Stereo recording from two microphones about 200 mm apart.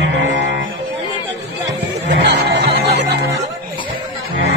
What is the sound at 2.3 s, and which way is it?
Music, 55° right (ahead or behind).